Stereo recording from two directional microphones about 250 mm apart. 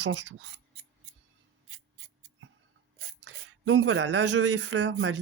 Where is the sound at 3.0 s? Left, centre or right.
Right.